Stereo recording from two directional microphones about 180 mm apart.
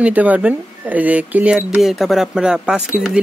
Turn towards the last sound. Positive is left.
turn(degrees=-5)  # may be behind; listen again after turning